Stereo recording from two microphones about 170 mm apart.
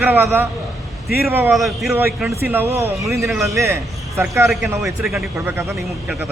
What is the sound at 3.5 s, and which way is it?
Speech, 15° right (ahead or behind).